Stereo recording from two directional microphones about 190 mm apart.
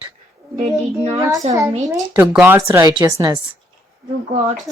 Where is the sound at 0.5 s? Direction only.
35° right (ahead or behind).